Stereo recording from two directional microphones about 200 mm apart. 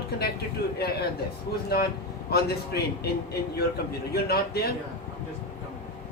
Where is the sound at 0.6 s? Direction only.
50° left (ahead or behind).